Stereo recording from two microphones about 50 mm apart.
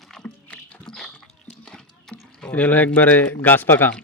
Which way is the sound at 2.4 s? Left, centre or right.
Left.